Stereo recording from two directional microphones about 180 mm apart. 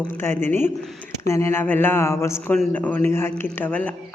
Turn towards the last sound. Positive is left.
turn(degrees=10)  # may be behind; listen again after turning